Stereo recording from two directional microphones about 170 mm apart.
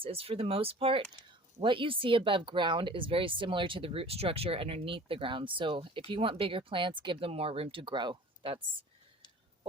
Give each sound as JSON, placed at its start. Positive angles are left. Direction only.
{"t": 0.0, "sound": "speech", "side_deg": -35}